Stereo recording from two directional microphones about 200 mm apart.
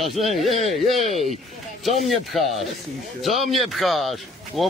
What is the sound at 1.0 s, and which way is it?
Speech, 35° right (ahead or behind).